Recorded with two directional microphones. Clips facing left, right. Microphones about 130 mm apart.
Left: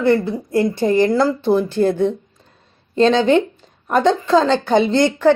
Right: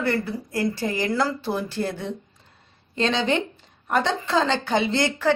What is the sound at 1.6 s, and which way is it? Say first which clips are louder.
A woman's voice: left 11 dB; 50° left (ahead or behind).